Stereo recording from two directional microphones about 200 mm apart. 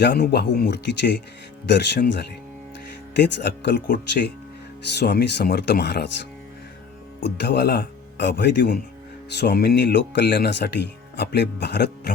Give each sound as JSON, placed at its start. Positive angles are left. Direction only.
{"t": 0.0, "sound": "speech", "side_deg": 55}
{"t": 4.9, "sound": "speech", "side_deg": 55}